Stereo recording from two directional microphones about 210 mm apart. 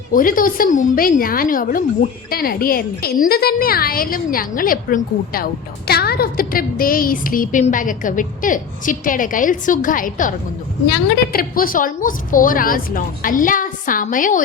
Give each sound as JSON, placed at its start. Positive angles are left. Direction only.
{"t": 0.1, "sound": "a woman's voice", "side_deg": 40}